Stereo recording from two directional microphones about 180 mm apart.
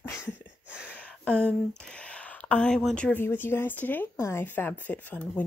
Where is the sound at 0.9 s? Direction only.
5° left (ahead or behind).